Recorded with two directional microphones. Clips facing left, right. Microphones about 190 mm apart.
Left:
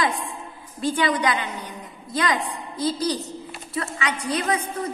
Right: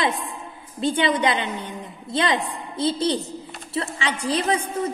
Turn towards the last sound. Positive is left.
turn(degrees=-30)  # may be behind; listen again after turning